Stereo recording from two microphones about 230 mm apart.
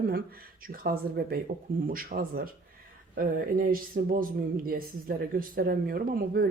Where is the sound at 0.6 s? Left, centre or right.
Right.